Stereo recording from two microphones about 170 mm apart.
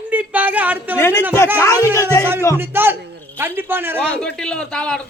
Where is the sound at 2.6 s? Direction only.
10° right (ahead or behind).